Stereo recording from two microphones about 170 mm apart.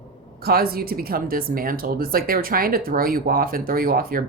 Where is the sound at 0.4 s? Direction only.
65° right (ahead or behind).